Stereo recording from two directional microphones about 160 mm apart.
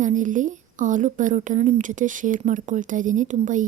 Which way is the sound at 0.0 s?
55° right (ahead or behind).